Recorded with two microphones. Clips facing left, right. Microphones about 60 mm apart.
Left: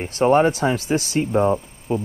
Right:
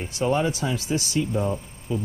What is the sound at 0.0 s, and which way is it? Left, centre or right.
Speech, left.